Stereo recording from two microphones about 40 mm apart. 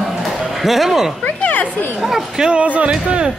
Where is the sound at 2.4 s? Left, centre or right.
Right.